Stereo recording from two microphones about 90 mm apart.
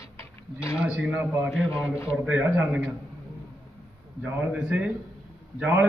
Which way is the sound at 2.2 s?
15° right (ahead or behind).